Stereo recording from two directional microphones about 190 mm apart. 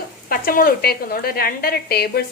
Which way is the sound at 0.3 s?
50° left (ahead or behind).